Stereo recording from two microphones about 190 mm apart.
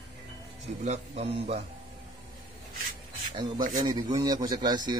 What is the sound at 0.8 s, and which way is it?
Speech, 35° right (ahead or behind).